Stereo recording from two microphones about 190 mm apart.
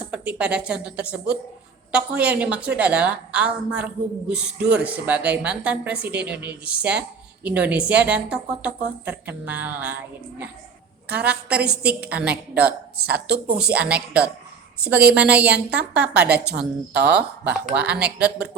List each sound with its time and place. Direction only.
0.1 s speech: 5° right (ahead or behind)
16.5 s a woman's voice: 60° right (ahead or behind)
17.4 s speech: 5° right (ahead or behind)